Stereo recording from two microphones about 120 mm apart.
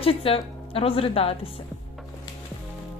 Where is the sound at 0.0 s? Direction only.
50° left (ahead or behind).